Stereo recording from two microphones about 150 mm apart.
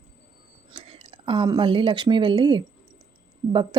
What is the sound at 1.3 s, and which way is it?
A woman's voice, 30° right (ahead or behind).